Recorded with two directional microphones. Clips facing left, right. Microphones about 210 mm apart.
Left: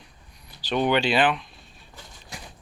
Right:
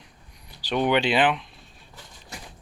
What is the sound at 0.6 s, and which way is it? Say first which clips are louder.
Speech: even; 15° right (ahead or behind).